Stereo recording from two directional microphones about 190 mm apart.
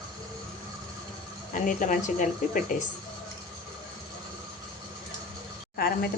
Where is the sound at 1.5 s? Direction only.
45° left (ahead or behind).